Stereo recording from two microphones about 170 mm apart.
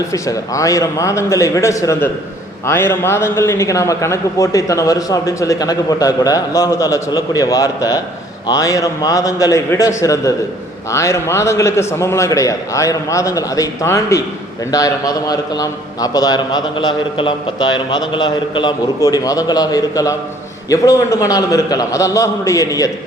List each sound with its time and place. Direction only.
0.1 s a man's voice: 20° left (ahead or behind)